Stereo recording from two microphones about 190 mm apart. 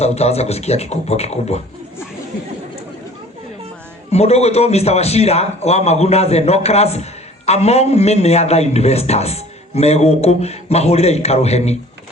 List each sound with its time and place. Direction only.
0.0 s a man's voice: 35° left (ahead or behind)
4.1 s a man's voice: 35° left (ahead or behind)